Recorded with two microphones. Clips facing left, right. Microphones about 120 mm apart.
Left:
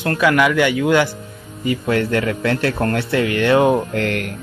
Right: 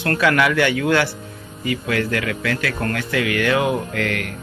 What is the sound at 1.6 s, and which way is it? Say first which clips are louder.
Speech: left 3 dB; 30° left (ahead or behind).